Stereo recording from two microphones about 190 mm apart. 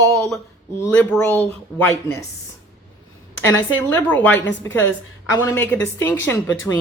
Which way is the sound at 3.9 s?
10° left (ahead or behind).